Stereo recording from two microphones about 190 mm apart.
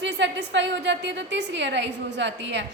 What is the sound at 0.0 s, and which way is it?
A woman's voice, 70° right (ahead or behind).